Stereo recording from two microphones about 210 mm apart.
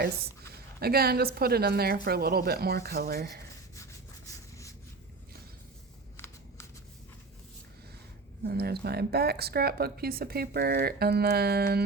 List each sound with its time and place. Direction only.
0.5 s speech: 50° right (ahead or behind)
4.3 s a sound: 15° left (ahead or behind)
6.1 s shuffling cards: 10° left (ahead or behind)
8.4 s speech: 50° right (ahead or behind)